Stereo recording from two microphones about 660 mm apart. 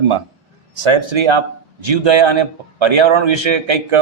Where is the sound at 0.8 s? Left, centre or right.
Right.